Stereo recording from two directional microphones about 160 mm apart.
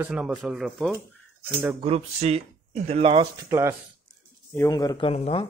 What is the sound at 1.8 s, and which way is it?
Speech, 40° right (ahead or behind).